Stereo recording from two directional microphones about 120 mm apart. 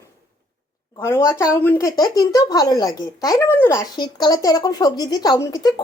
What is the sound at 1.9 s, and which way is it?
Speech, 30° left (ahead or behind).